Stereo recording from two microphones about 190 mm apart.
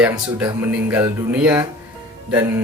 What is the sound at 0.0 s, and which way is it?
Speech, 10° right (ahead or behind).